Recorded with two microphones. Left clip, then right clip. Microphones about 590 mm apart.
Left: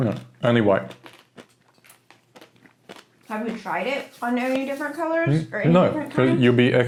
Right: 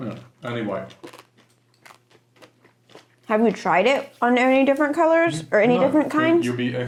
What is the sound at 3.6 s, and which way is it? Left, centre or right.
A woman's voice, right.